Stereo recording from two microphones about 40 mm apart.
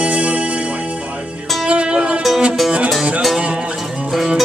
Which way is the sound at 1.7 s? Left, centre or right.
Right.